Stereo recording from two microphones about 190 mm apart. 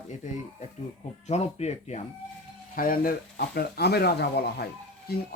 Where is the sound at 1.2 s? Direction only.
35° left (ahead or behind).